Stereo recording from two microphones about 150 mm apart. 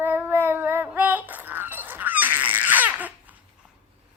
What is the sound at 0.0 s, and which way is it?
Child singing, 10° right (ahead or behind).